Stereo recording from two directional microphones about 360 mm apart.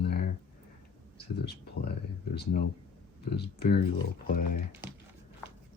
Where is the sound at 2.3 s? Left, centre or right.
Left.